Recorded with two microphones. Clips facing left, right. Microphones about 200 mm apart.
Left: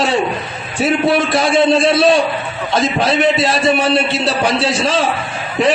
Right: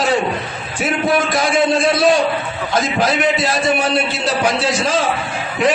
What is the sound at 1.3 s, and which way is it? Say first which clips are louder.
Speech: left 3 dB; 25° left (ahead or behind).